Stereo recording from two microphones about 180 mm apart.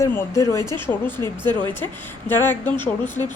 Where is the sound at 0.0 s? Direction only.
15° left (ahead or behind).